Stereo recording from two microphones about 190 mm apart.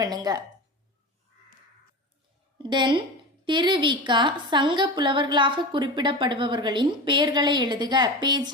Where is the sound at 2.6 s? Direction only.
25° right (ahead or behind).